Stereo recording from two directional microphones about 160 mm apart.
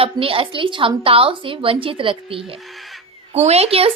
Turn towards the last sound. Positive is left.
turn(degrees=-40)  # may be behind; listen again after turning